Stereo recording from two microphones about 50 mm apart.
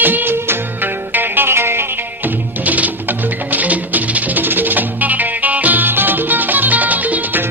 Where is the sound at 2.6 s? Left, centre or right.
Right.